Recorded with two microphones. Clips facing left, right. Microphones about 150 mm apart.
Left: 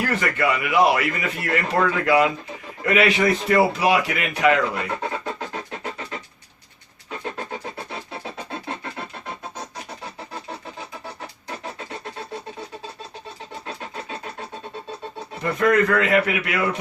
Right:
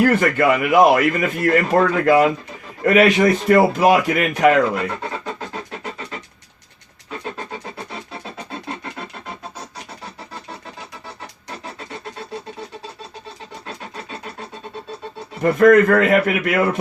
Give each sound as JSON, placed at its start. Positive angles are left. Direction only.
{"t": 0.0, "sound": "a man's voice", "side_deg": -50}
{"t": 15.4, "sound": "a man's voice", "side_deg": -50}